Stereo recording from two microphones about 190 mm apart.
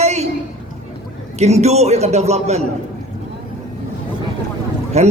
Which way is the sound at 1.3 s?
35° right (ahead or behind).